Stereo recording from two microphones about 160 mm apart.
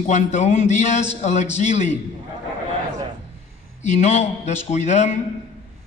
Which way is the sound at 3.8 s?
45° left (ahead or behind).